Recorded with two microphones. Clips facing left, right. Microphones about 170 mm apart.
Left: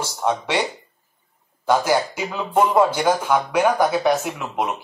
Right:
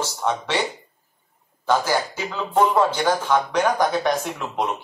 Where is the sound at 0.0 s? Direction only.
15° left (ahead or behind).